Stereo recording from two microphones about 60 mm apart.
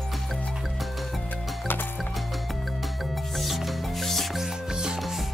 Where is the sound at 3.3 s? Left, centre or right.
Centre.